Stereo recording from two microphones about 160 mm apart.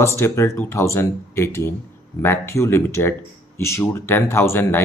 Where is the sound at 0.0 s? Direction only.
15° left (ahead or behind).